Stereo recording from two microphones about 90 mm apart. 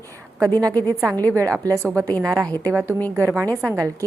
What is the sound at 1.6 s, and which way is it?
Speech, 40° right (ahead or behind).